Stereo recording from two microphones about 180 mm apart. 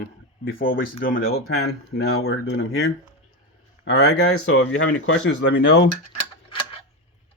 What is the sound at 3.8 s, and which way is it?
Speech, 70° left (ahead or behind).